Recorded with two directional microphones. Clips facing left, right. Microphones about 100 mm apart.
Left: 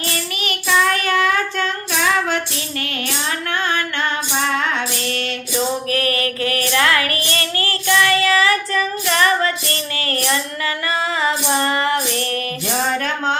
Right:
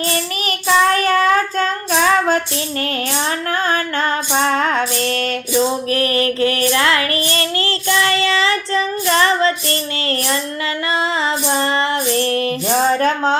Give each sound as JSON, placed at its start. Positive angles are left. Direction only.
{"t": 0.1, "sound": "child singing", "side_deg": -35}
{"t": 3.5, "sound": "music", "side_deg": -35}
{"t": 5.9, "sound": "child singing", "side_deg": -30}
{"t": 10.9, "sound": "music", "side_deg": -30}